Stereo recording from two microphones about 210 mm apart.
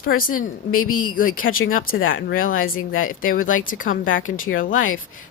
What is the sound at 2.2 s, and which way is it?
Speech, 45° left (ahead or behind).